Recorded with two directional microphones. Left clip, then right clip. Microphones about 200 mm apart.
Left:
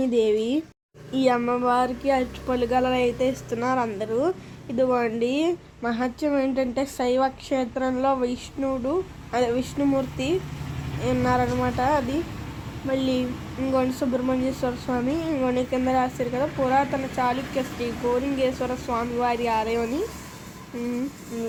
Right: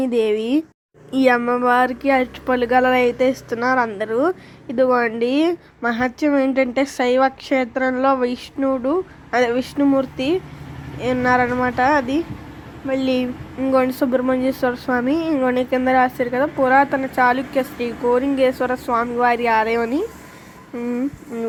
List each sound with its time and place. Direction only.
0.0 s speech: 20° right (ahead or behind)
13.7 s speech: 25° right (ahead or behind)